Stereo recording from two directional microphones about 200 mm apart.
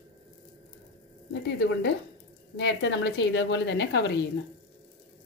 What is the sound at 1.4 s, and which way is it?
A woman's voice, 60° left (ahead or behind).